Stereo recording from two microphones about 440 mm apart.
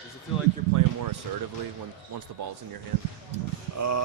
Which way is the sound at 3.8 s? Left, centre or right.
Right.